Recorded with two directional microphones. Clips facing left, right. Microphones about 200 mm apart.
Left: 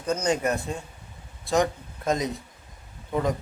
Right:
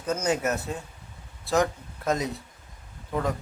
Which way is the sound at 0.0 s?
5° right (ahead or behind).